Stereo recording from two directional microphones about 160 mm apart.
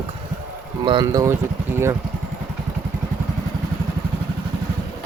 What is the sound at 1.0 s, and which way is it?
Speech, 20° right (ahead or behind).